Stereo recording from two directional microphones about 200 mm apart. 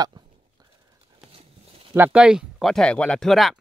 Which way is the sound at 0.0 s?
20° right (ahead or behind).